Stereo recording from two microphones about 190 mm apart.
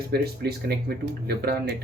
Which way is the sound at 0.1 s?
55° right (ahead or behind).